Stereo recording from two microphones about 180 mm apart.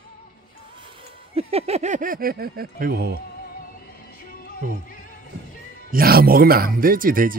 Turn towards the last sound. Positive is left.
turn(degrees=-50)  # may be behind; listen again after turning